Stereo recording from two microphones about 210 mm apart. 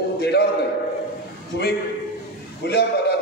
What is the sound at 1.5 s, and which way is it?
A man's voice, 50° left (ahead or behind).